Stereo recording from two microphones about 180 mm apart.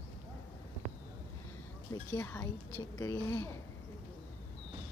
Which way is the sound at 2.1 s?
15° left (ahead or behind).